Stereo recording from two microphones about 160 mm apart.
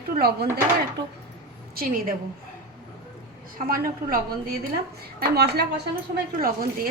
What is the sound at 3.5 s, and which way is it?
Speech, 65° right (ahead or behind).